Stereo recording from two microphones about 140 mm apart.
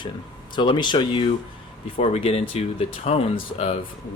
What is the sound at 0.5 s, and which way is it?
Speech, 35° left (ahead or behind).